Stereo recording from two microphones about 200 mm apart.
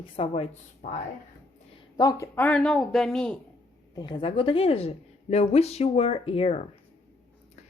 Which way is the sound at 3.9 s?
20° left (ahead or behind).